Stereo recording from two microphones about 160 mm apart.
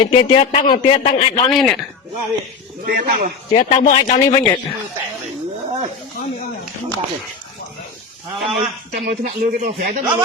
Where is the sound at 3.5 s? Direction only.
50° left (ahead or behind).